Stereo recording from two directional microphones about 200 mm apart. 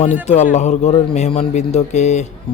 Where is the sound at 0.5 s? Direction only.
35° left (ahead or behind).